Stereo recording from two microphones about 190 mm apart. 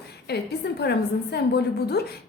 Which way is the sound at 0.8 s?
60° left (ahead or behind).